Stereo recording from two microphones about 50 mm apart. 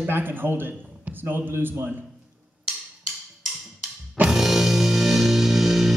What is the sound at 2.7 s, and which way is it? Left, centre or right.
Wood block, centre.